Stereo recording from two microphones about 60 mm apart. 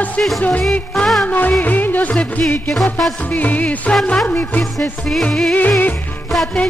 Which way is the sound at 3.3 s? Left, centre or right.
Left.